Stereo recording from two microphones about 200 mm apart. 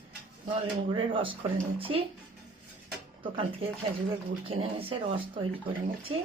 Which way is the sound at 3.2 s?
25° right (ahead or behind).